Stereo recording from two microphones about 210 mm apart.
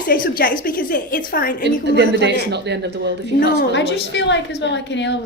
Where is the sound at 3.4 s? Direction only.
50° left (ahead or behind).